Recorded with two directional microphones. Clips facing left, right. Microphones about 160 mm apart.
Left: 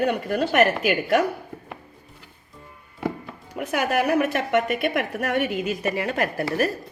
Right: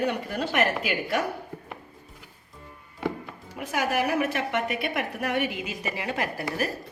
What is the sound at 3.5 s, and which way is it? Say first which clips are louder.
A woman's voice: left 4 dB; 55° left (ahead or behind).